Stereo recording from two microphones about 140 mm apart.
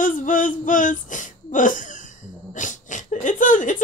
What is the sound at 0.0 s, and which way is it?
Speech, 70° left (ahead or behind).